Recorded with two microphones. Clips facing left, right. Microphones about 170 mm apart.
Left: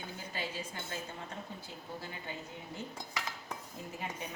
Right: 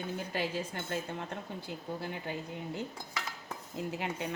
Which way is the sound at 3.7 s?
75° right (ahead or behind).